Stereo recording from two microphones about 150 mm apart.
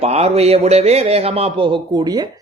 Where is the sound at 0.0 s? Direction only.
45° right (ahead or behind).